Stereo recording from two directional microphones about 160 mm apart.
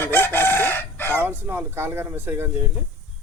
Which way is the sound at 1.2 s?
15° right (ahead or behind).